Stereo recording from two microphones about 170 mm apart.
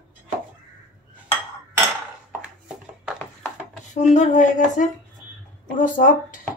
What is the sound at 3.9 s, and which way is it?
Speech, 45° left (ahead or behind).